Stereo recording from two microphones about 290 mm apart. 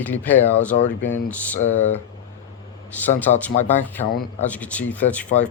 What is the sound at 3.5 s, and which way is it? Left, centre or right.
Speech, left.